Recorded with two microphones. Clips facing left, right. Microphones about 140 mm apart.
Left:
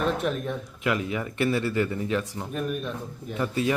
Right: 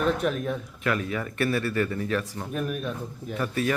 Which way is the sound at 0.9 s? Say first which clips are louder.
Left 1 dB; 20° left (ahead or behind).